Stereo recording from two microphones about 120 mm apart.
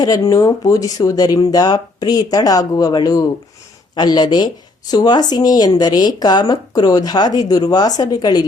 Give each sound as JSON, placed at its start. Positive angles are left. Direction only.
{"t": 0.0, "sound": "speech", "side_deg": 30}